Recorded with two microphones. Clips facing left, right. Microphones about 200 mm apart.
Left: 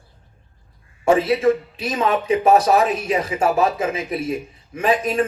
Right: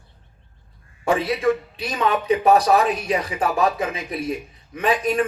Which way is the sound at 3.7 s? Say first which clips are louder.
Left 3 dB; 30° right (ahead or behind).